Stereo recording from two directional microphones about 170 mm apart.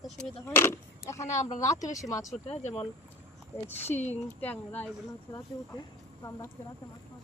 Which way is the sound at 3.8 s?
40° left (ahead or behind).